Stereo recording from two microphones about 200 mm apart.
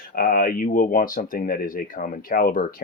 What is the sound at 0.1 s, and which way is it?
Speech, 45° left (ahead or behind).